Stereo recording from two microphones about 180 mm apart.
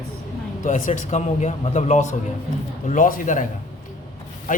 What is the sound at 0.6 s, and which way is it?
A woman's voice, 45° left (ahead or behind).